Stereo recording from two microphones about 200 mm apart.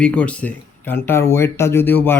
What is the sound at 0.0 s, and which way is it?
Speech, 5° left (ahead or behind).